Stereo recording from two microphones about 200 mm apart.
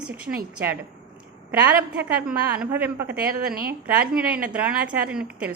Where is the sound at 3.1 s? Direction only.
50° right (ahead or behind).